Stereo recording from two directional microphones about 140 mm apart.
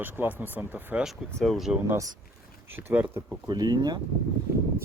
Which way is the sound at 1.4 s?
Centre (ahead or behind).